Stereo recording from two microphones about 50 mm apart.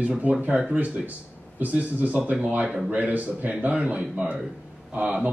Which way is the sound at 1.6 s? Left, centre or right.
Right.